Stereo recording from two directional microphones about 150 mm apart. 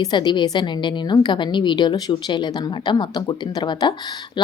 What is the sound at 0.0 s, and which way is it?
A woman's voice, 30° left (ahead or behind).